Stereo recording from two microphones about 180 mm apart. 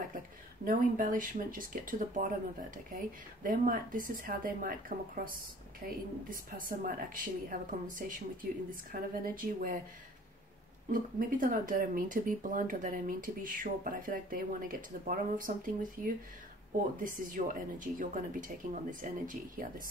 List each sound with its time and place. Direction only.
0.7 s speech: 45° right (ahead or behind)
9.2 s speech: 50° right (ahead or behind)
10.9 s speech: 50° right (ahead or behind)